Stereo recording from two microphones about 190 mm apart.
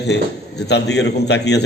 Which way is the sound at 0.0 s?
60° left (ahead or behind).